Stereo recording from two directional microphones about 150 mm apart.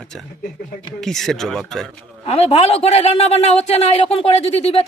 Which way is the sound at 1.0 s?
Centre (ahead or behind).